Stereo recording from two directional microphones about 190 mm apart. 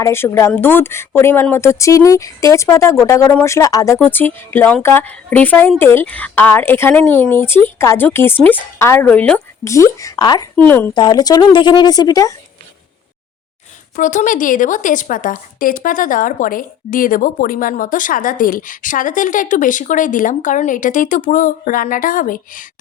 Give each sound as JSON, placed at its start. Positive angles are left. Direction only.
{"t": 0.0, "sound": "speech", "side_deg": 15}
{"t": 13.9, "sound": "speech", "side_deg": 40}